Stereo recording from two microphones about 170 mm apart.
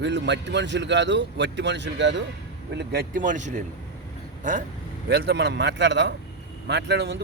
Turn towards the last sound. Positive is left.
turn(degrees=-85)